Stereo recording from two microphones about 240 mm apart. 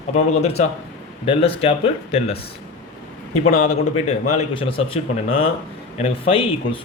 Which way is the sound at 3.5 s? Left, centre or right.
Left.